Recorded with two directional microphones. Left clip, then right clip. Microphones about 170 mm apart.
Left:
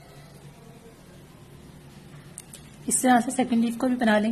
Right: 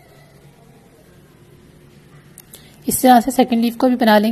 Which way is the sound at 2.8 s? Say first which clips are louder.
Right 10 dB; 25° right (ahead or behind).